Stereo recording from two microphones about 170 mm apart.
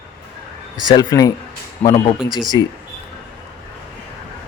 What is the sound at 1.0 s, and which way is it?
Speech, 20° left (ahead or behind).